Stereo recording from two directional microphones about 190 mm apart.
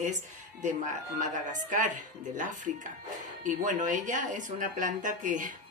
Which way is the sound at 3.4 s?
40° right (ahead or behind).